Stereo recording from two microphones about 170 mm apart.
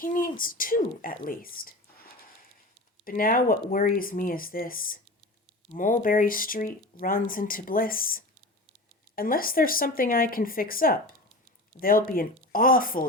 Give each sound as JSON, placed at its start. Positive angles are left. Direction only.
{"t": 0.0, "sound": "speech", "side_deg": 55}